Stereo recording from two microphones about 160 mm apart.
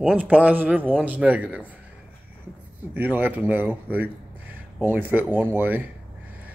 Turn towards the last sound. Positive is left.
turn(degrees=-10)  # may be behind; listen again after turning